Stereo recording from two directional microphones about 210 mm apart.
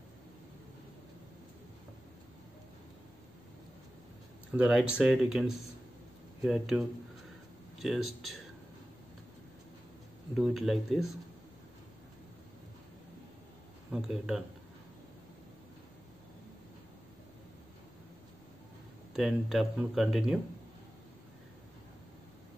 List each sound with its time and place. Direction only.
4.5 s speech: 5° right (ahead or behind)
10.3 s speech: centre (ahead or behind)
13.9 s speech: centre (ahead or behind)
19.1 s speech: centre (ahead or behind)